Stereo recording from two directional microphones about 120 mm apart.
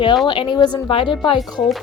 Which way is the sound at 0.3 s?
40° left (ahead or behind).